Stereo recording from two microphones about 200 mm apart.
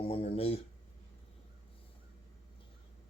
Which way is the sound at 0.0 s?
30° left (ahead or behind).